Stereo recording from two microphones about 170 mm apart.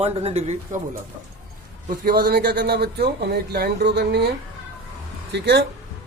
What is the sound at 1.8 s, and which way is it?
Speech, 60° right (ahead or behind).